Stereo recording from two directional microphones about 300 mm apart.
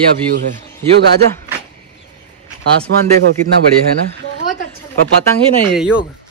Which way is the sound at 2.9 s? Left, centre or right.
Right.